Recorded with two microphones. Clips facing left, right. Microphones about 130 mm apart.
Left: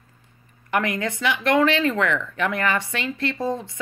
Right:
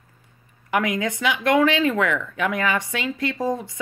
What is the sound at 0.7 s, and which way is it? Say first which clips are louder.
Speech: right 1 dB; 10° right (ahead or behind).